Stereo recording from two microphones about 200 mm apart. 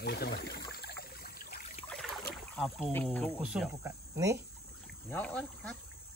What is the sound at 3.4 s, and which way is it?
Speech, 5° right (ahead or behind).